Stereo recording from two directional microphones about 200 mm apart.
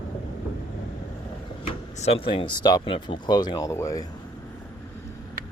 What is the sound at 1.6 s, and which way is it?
Speech, 30° left (ahead or behind).